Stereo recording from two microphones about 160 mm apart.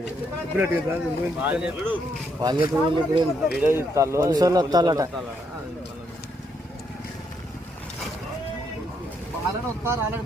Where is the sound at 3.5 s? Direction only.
15° right (ahead or behind).